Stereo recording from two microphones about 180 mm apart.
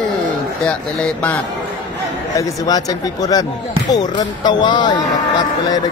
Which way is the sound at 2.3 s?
20° left (ahead or behind).